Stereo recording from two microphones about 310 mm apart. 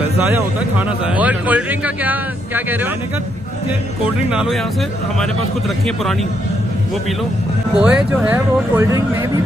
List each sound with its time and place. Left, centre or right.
0.3 s a man's voice: centre
4.3 s a man's voice: centre
7.7 s speech: centre